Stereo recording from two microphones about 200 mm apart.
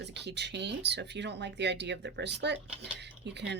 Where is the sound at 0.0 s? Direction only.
60° right (ahead or behind).